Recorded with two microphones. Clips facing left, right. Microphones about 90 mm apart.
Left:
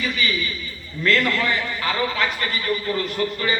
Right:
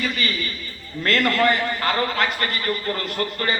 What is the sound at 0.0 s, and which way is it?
A man's voice, 45° right (ahead or behind).